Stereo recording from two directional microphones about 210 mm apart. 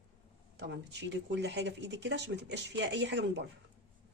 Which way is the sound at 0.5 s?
55° right (ahead or behind).